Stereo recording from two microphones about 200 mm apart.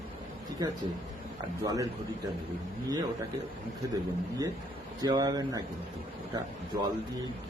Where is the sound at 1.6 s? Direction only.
15° right (ahead or behind).